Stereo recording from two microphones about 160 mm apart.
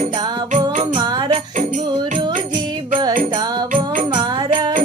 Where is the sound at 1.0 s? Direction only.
30° right (ahead or behind).